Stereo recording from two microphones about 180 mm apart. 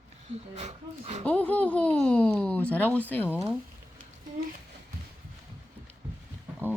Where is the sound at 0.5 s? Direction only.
40° right (ahead or behind).